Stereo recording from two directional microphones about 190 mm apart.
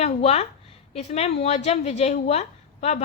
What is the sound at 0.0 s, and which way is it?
A woman's voice, 35° left (ahead or behind).